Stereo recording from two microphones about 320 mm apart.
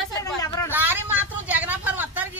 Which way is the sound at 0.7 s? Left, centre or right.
Centre.